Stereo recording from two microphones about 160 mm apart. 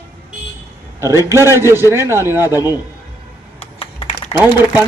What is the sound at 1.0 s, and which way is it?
A man's voice, 20° right (ahead or behind).